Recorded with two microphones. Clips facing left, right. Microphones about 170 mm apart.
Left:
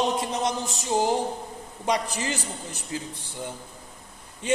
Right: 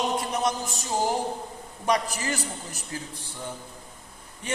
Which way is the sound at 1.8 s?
20° left (ahead or behind).